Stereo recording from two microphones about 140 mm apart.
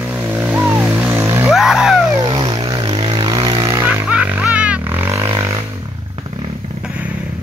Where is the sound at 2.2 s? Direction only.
35° right (ahead or behind).